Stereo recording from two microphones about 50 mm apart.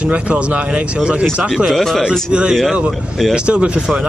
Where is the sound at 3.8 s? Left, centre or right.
Centre.